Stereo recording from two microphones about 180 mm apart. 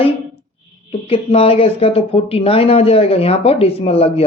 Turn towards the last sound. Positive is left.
turn(degrees=35)  # may be behind; listen again after turning